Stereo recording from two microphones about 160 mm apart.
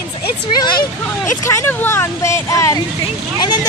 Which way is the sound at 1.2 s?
15° left (ahead or behind).